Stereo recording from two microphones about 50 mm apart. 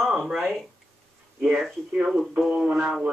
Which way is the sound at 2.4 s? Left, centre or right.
Right.